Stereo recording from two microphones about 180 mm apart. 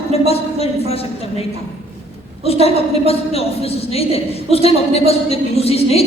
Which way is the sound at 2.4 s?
35° left (ahead or behind).